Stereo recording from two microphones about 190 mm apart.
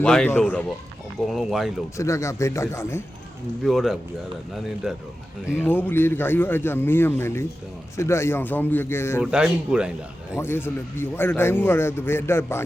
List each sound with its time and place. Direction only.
0.0 s a man's voice: 5° left (ahead or behind)
2.0 s a man's voice: 15° left (ahead or behind)
3.6 s speech: centre (ahead or behind)
5.5 s a man's voice: 10° left (ahead or behind)
9.2 s speech: 5° right (ahead or behind)
10.3 s a man's voice: 10° left (ahead or behind)